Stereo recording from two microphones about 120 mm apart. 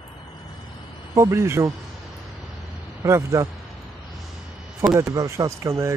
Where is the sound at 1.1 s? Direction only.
25° right (ahead or behind).